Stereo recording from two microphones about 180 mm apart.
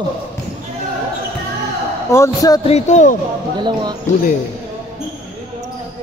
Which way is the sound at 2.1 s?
20° left (ahead or behind).